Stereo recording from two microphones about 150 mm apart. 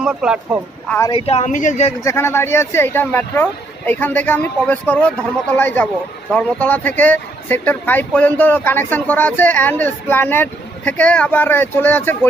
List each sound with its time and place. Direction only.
0.0 s speech: 5° right (ahead or behind)
0.9 s speech: 20° left (ahead or behind)
1.1 s speech: 40° left (ahead or behind)
2.0 s speech: 20° left (ahead or behind)